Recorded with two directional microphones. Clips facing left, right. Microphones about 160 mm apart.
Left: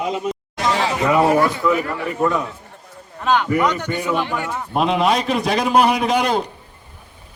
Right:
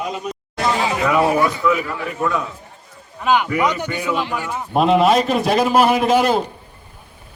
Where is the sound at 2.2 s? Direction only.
30° left (ahead or behind).